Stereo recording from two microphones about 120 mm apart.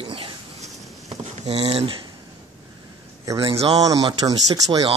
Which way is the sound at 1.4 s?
60° right (ahead or behind).